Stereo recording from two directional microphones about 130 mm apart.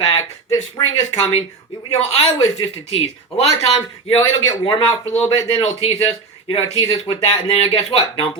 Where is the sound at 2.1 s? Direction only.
50° left (ahead or behind).